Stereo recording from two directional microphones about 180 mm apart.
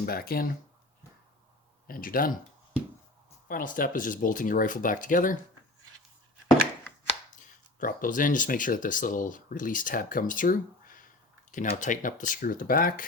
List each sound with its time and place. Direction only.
0.0 s speech: 55° left (ahead or behind)
1.9 s speech: 50° left (ahead or behind)
3.5 s speech: 50° left (ahead or behind)
7.3 s speech: 50° left (ahead or behind)